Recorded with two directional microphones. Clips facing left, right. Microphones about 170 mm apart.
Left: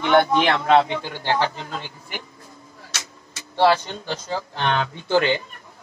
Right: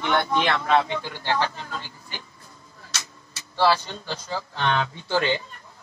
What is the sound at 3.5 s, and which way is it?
A man's voice, 20° left (ahead or behind).